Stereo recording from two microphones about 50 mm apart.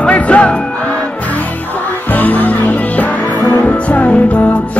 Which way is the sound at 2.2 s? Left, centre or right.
Left.